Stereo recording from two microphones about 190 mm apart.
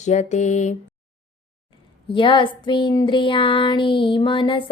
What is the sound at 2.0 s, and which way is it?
Child singing, 25° left (ahead or behind).